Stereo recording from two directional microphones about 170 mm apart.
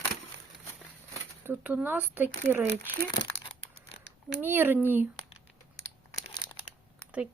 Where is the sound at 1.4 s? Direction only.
10° right (ahead or behind).